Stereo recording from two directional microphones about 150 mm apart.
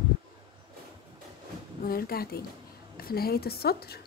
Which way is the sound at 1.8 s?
80° left.